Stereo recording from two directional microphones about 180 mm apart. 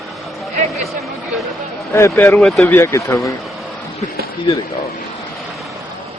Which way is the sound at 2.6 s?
15° left (ahead or behind).